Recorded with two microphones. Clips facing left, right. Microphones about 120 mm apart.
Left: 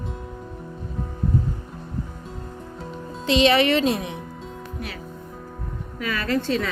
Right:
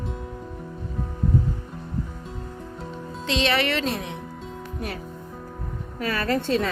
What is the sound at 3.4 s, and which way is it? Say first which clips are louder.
Speech: left 6 dB; 20° left (ahead or behind).